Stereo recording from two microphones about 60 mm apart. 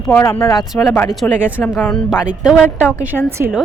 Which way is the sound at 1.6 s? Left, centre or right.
Left.